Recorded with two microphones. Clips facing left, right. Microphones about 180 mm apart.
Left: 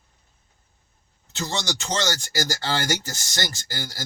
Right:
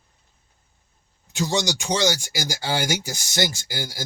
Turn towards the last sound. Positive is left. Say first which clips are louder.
# right 3 dB
turn(degrees=-15)  # may be behind; listen again after turning